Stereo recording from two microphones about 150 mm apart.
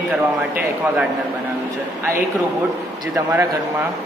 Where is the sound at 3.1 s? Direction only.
15° right (ahead or behind).